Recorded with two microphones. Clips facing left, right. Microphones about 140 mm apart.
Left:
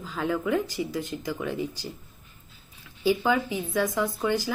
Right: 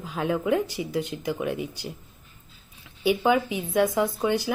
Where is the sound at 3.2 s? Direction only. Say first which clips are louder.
Right 3 dB; 15° right (ahead or behind).